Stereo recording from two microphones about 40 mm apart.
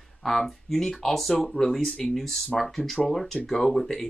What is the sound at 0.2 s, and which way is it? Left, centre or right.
Speech, centre.